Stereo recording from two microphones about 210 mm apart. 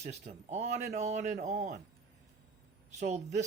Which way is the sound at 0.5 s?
35° right (ahead or behind).